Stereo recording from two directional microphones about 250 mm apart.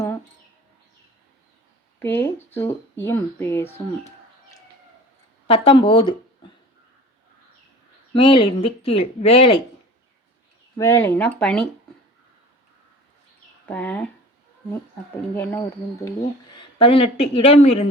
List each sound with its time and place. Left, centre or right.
2.0 s speech: centre
5.5 s speech: left
8.1 s speech: left
10.8 s speech: centre
13.7 s speech: centre
15.4 s speech: centre
16.6 s speech: left